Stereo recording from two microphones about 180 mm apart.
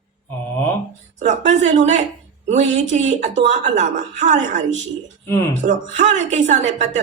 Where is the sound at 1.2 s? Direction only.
40° right (ahead or behind).